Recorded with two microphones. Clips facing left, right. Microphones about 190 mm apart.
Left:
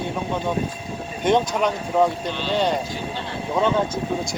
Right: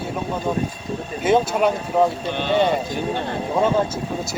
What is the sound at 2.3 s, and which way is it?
Speech, 55° right (ahead or behind).